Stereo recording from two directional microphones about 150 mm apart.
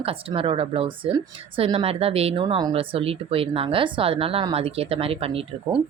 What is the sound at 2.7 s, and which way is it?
Speech, 40° right (ahead or behind).